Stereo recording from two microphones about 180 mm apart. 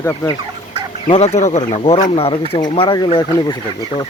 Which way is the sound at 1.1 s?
35° left (ahead or behind).